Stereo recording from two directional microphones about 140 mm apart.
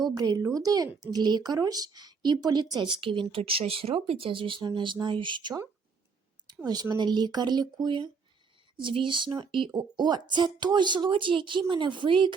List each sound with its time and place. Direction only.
0.0 s speech: 30° right (ahead or behind)
6.7 s speech: 30° right (ahead or behind)